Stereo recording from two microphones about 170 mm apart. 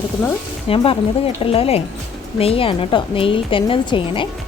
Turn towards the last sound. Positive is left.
turn(degrees=30)  # may be behind; listen again after turning